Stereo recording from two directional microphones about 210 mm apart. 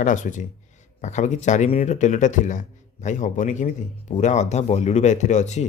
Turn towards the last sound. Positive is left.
turn(degrees=35)  # may be behind; listen again after turning